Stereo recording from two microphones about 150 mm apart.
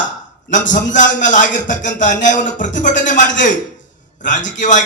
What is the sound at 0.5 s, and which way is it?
A man's voice, 60° left (ahead or behind).